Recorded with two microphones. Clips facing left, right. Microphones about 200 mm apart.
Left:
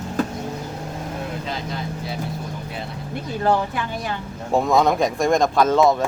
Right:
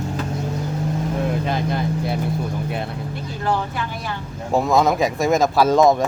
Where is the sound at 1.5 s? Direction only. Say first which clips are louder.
Right 6 dB; 55° right (ahead or behind).